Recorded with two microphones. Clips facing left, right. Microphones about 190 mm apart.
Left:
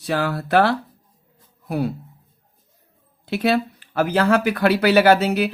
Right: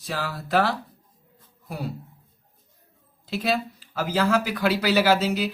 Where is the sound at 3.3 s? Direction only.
65° left (ahead or behind).